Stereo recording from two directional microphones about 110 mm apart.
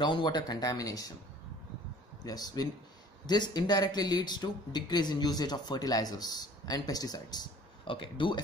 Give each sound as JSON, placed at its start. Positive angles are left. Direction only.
{"t": 0.0, "sound": "speech", "side_deg": 45}
{"t": 2.2, "sound": "speech", "side_deg": 35}
{"t": 7.8, "sound": "speech", "side_deg": 50}